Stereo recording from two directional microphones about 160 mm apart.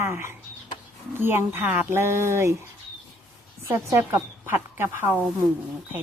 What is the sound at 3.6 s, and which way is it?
A woman's voice, 15° right (ahead or behind).